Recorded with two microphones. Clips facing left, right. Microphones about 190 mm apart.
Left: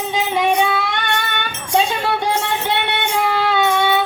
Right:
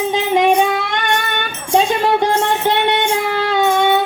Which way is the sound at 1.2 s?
45° right (ahead or behind).